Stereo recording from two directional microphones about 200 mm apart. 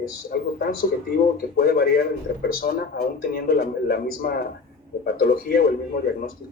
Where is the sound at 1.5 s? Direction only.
50° left (ahead or behind).